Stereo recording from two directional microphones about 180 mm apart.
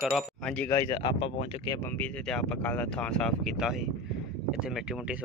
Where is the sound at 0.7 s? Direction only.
25° left (ahead or behind).